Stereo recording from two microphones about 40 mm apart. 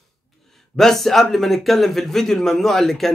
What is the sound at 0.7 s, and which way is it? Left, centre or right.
Speech, centre.